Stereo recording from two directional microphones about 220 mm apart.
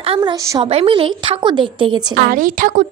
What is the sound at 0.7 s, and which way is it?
A woman's voice, 25° right (ahead or behind).